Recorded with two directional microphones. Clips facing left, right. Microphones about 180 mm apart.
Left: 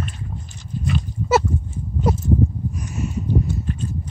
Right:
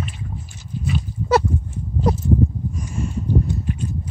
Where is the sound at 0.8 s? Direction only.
Centre (ahead or behind).